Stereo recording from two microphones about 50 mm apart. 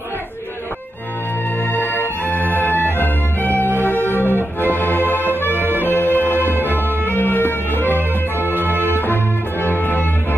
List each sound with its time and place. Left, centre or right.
1.7 s music: left